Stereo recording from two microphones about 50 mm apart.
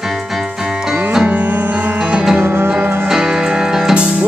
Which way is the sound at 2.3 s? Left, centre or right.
Right.